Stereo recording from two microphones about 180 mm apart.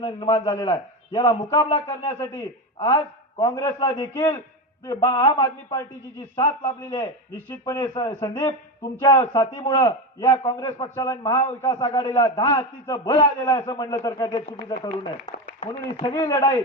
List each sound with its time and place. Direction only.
0.0 s a man's voice: 25° left (ahead or behind)
3.4 s a man's voice: 20° left (ahead or behind)
11.2 s a man's voice: 30° left (ahead or behind)
11.6 s a man's voice: 20° left (ahead or behind)